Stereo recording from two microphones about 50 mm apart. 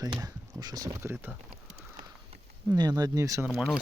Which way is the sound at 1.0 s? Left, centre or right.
Right.